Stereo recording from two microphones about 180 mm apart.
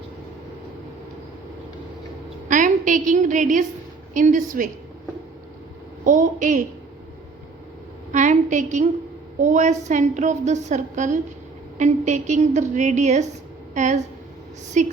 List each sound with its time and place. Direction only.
2.5 s a woman's voice: 45° right (ahead or behind)
6.1 s a woman's voice: 45° right (ahead or behind)
8.1 s a woman's voice: 45° right (ahead or behind)